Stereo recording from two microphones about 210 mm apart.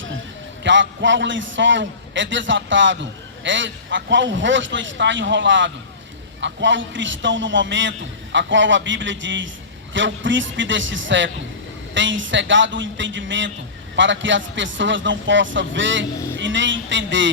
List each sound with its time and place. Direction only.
0.6 s a man's voice: 60° right (ahead or behind)